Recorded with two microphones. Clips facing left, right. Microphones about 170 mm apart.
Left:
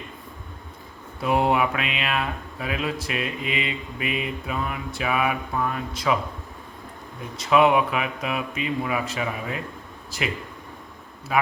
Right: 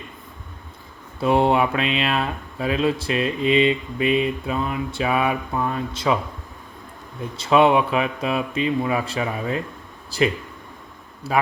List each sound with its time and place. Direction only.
1.2 s speech: 30° right (ahead or behind)
7.3 s speech: 30° right (ahead or behind)
11.3 s speech: 35° right (ahead or behind)